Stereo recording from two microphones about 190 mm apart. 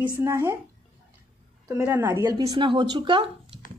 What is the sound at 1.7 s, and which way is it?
A woman's voice, 10° right (ahead or behind).